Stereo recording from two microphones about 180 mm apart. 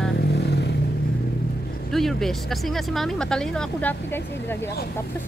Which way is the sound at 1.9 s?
Centre (ahead or behind).